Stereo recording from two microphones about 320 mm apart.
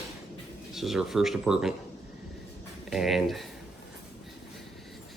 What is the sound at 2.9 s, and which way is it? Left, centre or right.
Speech, centre.